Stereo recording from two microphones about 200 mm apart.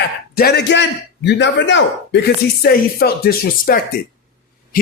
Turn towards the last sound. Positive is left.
turn(degrees=50)  # may be behind; listen again after turning